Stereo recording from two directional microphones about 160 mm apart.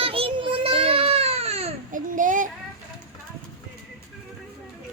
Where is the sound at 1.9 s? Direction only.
55° right (ahead or behind).